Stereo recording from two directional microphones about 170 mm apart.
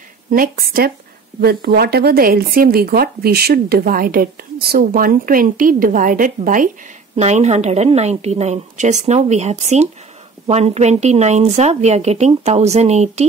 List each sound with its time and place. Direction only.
0.3 s speech: 60° right (ahead or behind)
7.2 s speech: 40° right (ahead or behind)